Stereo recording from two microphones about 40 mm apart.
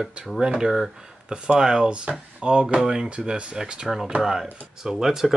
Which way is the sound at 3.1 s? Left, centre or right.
Right.